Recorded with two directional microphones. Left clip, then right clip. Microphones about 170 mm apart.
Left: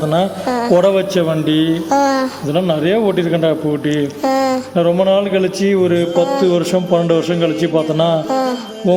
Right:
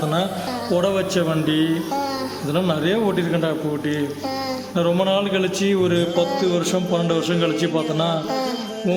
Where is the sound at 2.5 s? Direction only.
15° left (ahead or behind).